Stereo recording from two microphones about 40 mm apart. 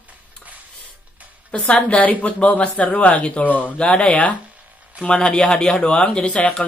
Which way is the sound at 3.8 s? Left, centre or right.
Left.